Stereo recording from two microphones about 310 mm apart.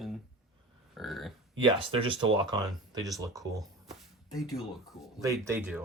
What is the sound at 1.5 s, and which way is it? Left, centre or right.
Speech, centre.